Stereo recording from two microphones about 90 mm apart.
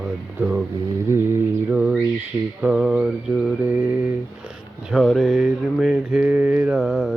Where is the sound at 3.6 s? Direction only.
20° right (ahead or behind).